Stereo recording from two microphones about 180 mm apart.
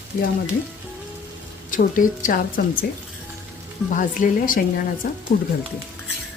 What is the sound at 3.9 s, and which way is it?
A woman's voice, 50° left (ahead or behind).